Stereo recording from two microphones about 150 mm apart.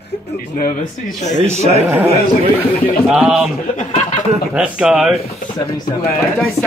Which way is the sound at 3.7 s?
55° left (ahead or behind).